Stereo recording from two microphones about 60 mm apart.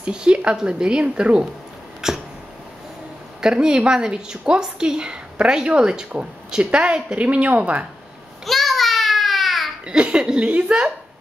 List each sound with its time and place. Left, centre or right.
0.0 s a woman's voice: centre
2.0 s dog: centre
3.3 s a woman's voice: centre
8.5 s a sound: centre
9.8 s a woman's voice: centre